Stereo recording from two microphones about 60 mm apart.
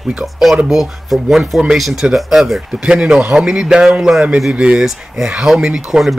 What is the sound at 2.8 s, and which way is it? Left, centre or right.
A man's voice, centre.